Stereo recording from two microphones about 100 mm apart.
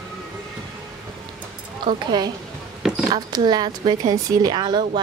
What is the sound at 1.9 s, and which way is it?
Speech, 45° right (ahead or behind).